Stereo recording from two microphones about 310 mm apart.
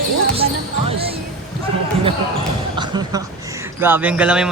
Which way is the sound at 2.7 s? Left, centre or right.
Centre.